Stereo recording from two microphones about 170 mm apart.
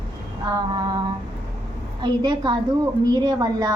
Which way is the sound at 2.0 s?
25° right (ahead or behind).